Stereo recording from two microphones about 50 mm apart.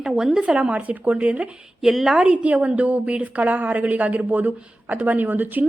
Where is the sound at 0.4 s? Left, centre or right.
Right.